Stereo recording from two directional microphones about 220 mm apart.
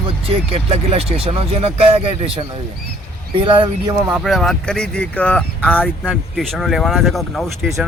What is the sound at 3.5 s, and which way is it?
Speech, 20° right (ahead or behind).